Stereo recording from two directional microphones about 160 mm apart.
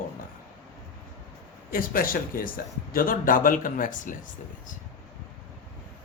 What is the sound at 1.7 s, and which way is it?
A man's voice, 60° left (ahead or behind).